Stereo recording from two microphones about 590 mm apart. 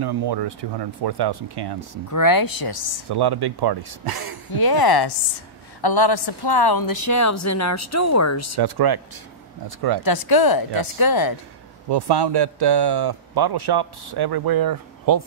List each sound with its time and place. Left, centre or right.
0.0 s speech: right
2.0 s speech: left
3.1 s speech: right
4.6 s speech: left
8.5 s speech: right
10.0 s speech: left
11.9 s speech: right